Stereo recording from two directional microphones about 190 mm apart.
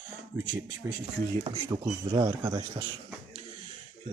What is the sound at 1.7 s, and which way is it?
Speech, 20° right (ahead or behind).